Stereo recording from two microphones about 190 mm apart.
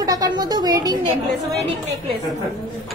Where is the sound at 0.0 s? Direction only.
20° right (ahead or behind).